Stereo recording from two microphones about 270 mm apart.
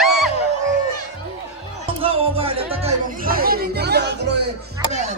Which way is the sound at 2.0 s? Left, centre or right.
Right.